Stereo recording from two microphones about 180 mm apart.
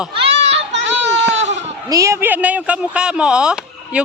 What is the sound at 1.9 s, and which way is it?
Speech, 15° right (ahead or behind).